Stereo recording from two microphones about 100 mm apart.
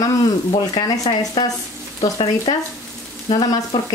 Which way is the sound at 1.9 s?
75° left (ahead or behind).